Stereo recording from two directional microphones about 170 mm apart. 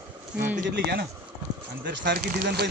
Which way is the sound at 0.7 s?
85° right.